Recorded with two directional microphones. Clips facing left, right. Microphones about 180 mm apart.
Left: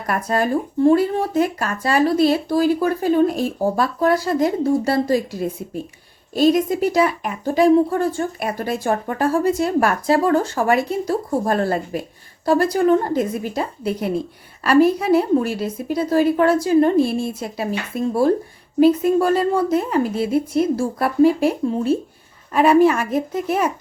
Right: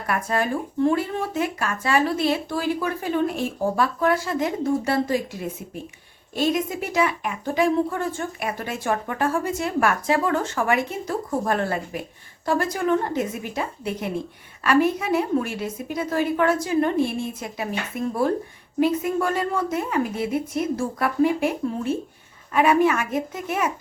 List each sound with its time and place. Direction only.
0.1 s a woman's voice: 40° left (ahead or behind)